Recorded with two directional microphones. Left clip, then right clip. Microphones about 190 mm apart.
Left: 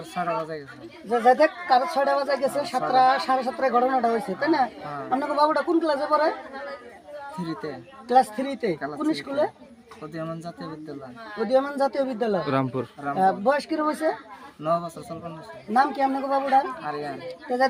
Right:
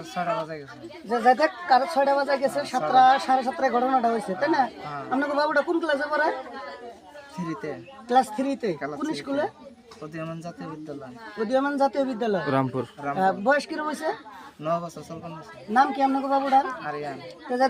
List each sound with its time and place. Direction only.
0.1 s speech: 5° right (ahead or behind)
1.1 s speech: 25° left (ahead or behind)
2.5 s speech: centre (ahead or behind)
2.9 s speech: 25° left (ahead or behind)
8.0 s speech: 25° left (ahead or behind)
11.5 s speech: 20° left (ahead or behind)
12.5 s speech: centre (ahead or behind)
13.1 s speech: 20° left (ahead or behind)
14.6 s speech: 5° right (ahead or behind)
15.7 s speech: 20° left (ahead or behind)
16.8 s speech: 5° right (ahead or behind)